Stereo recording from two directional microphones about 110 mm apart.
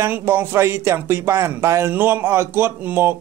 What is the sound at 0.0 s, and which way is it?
Speech, 25° right (ahead or behind).